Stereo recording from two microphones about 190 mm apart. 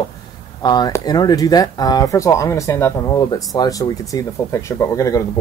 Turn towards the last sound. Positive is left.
turn(degrees=15)  # may be behind; listen again after turning